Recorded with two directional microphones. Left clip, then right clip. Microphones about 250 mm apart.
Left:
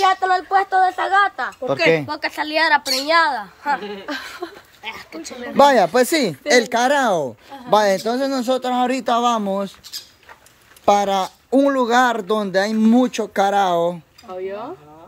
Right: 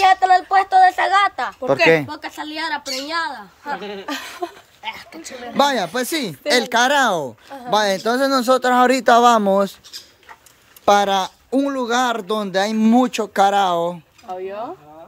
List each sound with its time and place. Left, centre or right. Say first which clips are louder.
0.0 s a sound: right 3 dB; right
1.7 s speech: right 3 dB; centre
2.0 s a woman's voice: left 6 dB; centre
4.1 s a sound: right 1 dB; right
4.8 s speech: even; centre
10.9 s speech: right 1 dB; centre
14.3 s speech: right 1 dB; right